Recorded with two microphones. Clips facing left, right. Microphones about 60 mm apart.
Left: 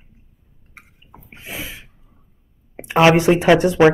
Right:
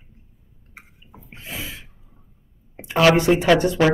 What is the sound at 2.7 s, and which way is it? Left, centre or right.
Speech, left.